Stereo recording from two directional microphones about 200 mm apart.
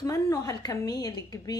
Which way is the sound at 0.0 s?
15° left (ahead or behind).